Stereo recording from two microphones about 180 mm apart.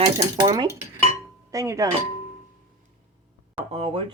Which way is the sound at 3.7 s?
30° right (ahead or behind).